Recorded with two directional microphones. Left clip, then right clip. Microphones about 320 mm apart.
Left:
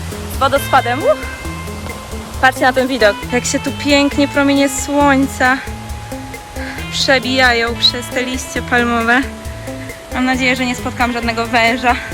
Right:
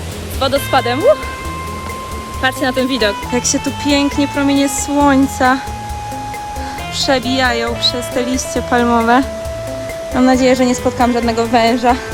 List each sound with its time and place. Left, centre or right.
0.3 s speech: centre
2.4 s speech: centre
7.0 s speech: centre
8.7 s speech: centre